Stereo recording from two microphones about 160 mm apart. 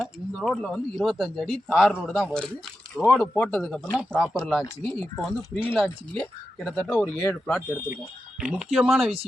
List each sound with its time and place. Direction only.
0.0 s speech: centre (ahead or behind)
8.4 s speech: 5° right (ahead or behind)